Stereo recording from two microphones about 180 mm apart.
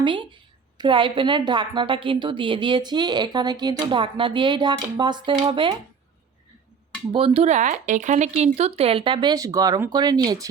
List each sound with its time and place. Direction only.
0.0 s a woman's voice: 25° right (ahead or behind)
7.1 s speech: 30° right (ahead or behind)